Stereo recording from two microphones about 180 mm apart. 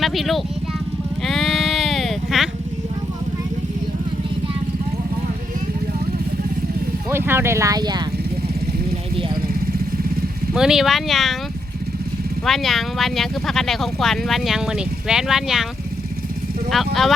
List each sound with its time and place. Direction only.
0.0 s speech: centre (ahead or behind)
1.2 s a sound: centre (ahead or behind)
7.1 s speech: 15° right (ahead or behind)
10.5 s speech: 5° right (ahead or behind)
12.5 s speech: centre (ahead or behind)
16.7 s speech: centre (ahead or behind)